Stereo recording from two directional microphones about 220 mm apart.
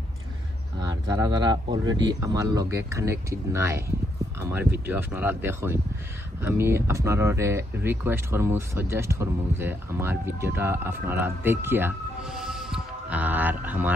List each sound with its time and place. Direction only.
0.7 s speech: 20° right (ahead or behind)